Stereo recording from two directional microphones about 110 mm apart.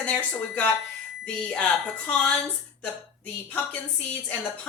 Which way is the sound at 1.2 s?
10° left (ahead or behind).